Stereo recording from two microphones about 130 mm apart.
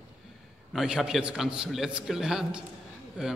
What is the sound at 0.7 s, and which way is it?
A man's voice, 5° right (ahead or behind).